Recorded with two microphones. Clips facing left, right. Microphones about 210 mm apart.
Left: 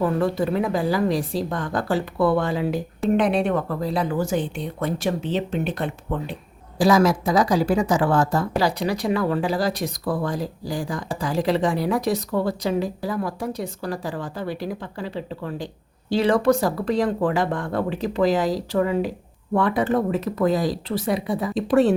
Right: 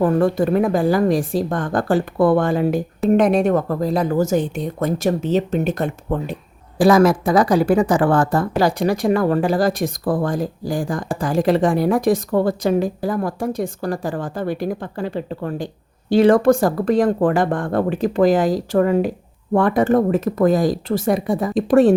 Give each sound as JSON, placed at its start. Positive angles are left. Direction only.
{"t": 0.0, "sound": "speech", "side_deg": -50}
{"t": 6.7, "sound": "speech", "side_deg": -55}